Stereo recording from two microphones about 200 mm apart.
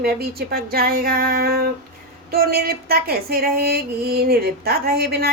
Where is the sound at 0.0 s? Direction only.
50° right (ahead or behind).